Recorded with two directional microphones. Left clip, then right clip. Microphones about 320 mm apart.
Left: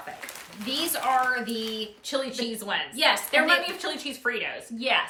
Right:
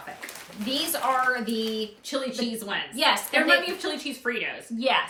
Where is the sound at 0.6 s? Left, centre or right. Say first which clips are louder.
Right 1 dB; centre.